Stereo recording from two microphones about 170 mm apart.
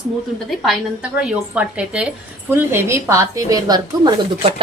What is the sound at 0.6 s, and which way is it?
A woman's voice, centre (ahead or behind).